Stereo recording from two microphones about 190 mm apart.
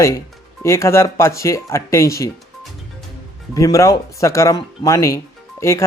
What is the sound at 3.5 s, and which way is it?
Speech, 15° left (ahead or behind).